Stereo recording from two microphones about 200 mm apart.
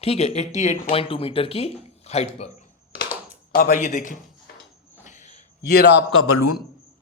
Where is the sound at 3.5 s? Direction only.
40° left (ahead or behind).